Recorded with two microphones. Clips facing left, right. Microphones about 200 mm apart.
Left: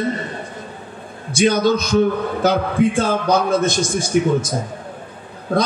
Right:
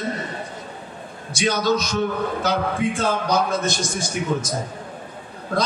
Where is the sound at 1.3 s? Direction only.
55° left (ahead or behind).